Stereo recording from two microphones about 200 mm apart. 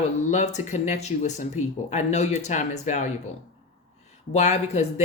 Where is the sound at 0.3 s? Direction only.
35° left (ahead or behind).